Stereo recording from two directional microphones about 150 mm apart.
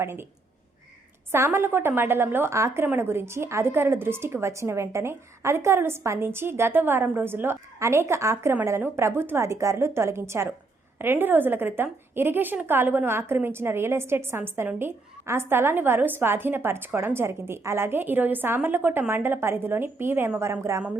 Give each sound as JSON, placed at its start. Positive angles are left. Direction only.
{"t": 0.0, "sound": "a woman's voice", "side_deg": -15}
{"t": 1.3, "sound": "a woman's voice", "side_deg": -20}